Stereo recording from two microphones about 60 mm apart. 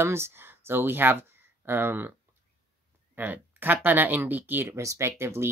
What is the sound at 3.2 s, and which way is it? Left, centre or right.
Speech, right.